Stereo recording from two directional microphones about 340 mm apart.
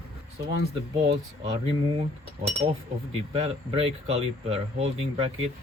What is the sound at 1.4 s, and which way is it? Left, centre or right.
Speech, centre.